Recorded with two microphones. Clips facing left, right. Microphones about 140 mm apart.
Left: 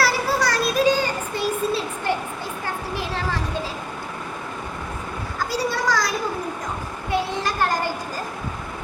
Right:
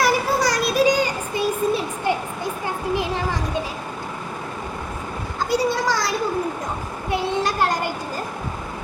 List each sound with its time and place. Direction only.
0.0 s child singing: 15° right (ahead or behind)
2.9 s children playing: 15° right (ahead or behind)
5.5 s a sound: 25° right (ahead or behind)